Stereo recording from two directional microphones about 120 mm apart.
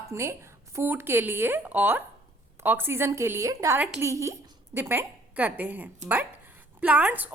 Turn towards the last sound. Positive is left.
turn(degrees=-15)  # may be behind; listen again after turning